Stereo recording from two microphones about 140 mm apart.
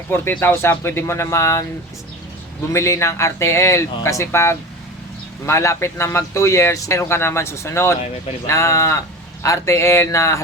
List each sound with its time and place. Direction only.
0.1 s speech: 15° left (ahead or behind)
2.7 s speech: 20° left (ahead or behind)